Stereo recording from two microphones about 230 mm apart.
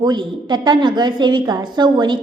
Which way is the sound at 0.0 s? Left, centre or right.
Centre.